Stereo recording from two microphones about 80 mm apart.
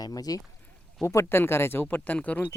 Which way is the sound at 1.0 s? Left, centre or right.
Left.